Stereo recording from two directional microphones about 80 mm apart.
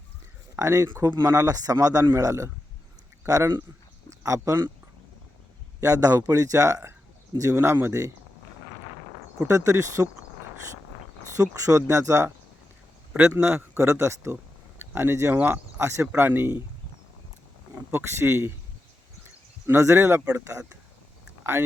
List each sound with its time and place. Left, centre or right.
0.5 s a man's voice: right
5.8 s a man's voice: right
9.4 s speech: right
11.3 s a man's voice: right
13.2 s speech: right
17.9 s speech: right
19.6 s speech: right